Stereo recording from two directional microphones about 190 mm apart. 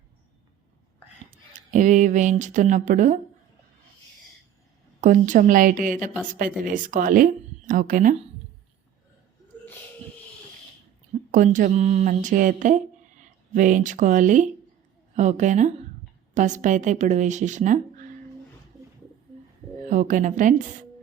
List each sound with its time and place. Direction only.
1.5 s speech: 40° right (ahead or behind)
4.9 s speech: 40° right (ahead or behind)
11.3 s speech: 40° right (ahead or behind)
19.9 s speech: 40° right (ahead or behind)